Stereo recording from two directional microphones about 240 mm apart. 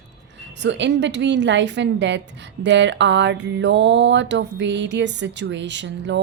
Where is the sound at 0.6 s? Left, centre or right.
Right.